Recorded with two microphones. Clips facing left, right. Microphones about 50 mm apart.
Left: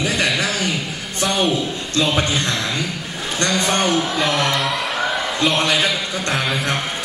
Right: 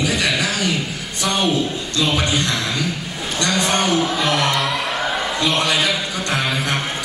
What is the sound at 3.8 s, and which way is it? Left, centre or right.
Speech, centre.